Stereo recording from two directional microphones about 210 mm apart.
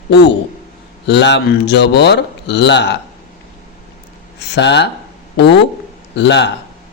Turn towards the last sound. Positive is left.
turn(degrees=55)  # may be behind; listen again after turning